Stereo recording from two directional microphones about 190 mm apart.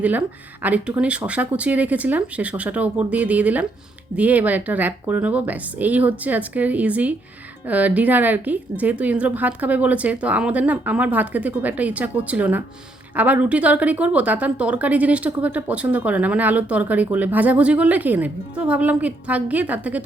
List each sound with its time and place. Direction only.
0.0 s a woman's voice: 10° right (ahead or behind)